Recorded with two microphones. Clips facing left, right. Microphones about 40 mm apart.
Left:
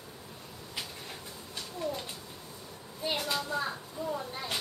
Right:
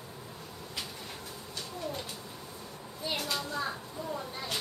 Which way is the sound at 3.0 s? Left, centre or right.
Centre.